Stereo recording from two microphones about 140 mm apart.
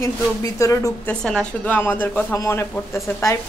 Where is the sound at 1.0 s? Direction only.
5° left (ahead or behind).